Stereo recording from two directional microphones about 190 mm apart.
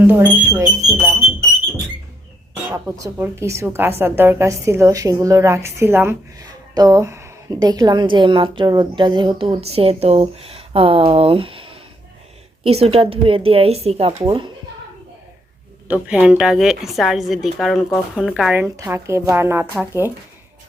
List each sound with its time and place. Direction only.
0.0 s speech: 10° right (ahead or behind)
2.7 s a woman's voice: 15° right (ahead or behind)
15.9 s a woman's voice: 5° right (ahead or behind)